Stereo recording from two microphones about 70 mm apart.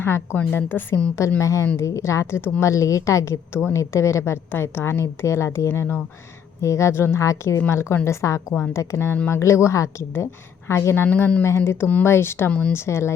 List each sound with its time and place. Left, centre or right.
0.5 s a woman's voice: left
1.4 s a woman's voice: left
7.3 s a woman's voice: left
7.7 s a woman's voice: left
11.0 s a woman's voice: left
11.4 s a woman's voice: left
12.5 s speech: centre
12.7 s a woman's voice: left